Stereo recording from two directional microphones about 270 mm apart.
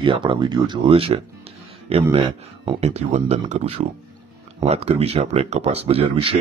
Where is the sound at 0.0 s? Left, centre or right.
Centre.